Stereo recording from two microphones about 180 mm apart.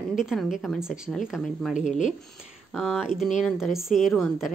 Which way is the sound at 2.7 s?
Centre (ahead or behind).